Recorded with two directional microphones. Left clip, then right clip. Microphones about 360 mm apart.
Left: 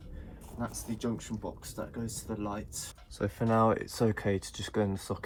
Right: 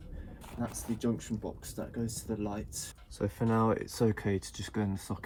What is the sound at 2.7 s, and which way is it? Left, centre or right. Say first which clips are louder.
Speech: even; centre.